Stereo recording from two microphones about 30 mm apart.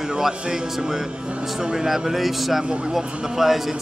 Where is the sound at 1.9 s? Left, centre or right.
Centre.